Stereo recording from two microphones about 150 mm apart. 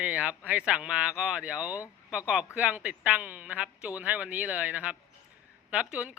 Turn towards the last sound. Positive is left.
turn(degrees=-10)  # may be behind; listen again after turning